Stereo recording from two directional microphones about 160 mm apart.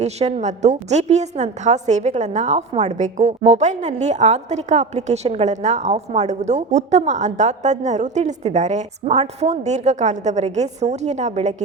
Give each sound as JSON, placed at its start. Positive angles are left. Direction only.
{"t": 0.0, "sound": "a woman's voice", "side_deg": -40}